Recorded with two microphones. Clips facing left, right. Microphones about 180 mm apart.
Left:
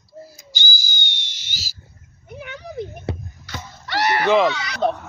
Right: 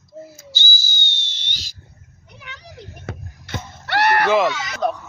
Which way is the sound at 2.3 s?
50° left (ahead or behind).